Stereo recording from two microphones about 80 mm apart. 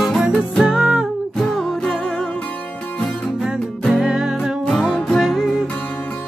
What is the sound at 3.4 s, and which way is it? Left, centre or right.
Music, centre.